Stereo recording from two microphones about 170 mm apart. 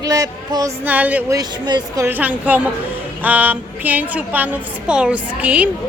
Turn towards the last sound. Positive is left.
turn(degrees=-10)  # may be behind; listen again after turning